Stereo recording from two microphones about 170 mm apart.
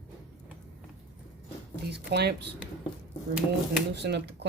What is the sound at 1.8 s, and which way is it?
Speech, 75° right (ahead or behind).